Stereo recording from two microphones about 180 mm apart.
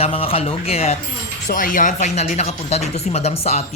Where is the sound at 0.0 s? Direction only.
30° left (ahead or behind).